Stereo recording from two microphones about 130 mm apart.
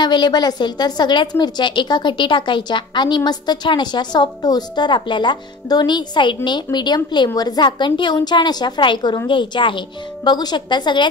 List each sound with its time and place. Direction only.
0.0 s a woman's voice: 35° left (ahead or behind)